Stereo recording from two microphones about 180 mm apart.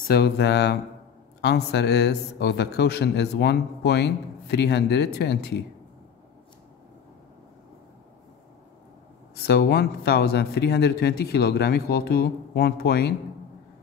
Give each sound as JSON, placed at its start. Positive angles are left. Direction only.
{"t": 0.1, "sound": "a man's voice", "side_deg": 65}
{"t": 9.3, "sound": "speech", "side_deg": 60}